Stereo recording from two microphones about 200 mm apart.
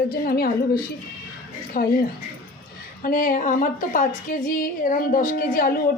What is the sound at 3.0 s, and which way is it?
Speech, 45° left (ahead or behind).